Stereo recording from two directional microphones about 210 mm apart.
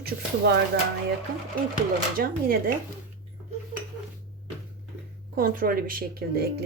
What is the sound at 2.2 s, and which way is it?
Speech, 45° right (ahead or behind).